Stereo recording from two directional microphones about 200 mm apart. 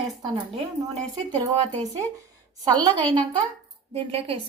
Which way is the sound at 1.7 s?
20° right (ahead or behind).